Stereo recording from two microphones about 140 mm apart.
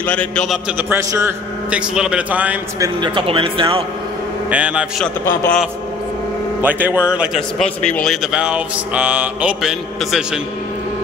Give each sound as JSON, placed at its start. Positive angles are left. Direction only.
{"t": 0.0, "sound": "a man's voice", "side_deg": 10}
{"t": 0.5, "sound": "a man's voice", "side_deg": -10}
{"t": 2.8, "sound": "speech", "side_deg": -35}
{"t": 4.5, "sound": "a man's voice", "side_deg": -10}
{"t": 6.6, "sound": "a man's voice", "side_deg": -10}
{"t": 7.5, "sound": "speech", "side_deg": 5}